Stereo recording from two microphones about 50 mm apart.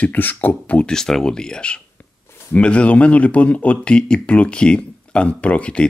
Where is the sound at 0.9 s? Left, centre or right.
Centre; by 5.8 s left.